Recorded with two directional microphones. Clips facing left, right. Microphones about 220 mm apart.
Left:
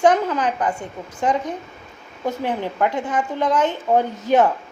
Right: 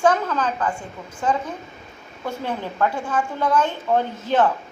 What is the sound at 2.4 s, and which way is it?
A woman's voice, 15° left (ahead or behind).